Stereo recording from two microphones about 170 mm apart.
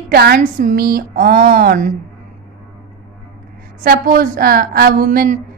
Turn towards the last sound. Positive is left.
turn(degrees=-55)  # may be behind; listen again after turning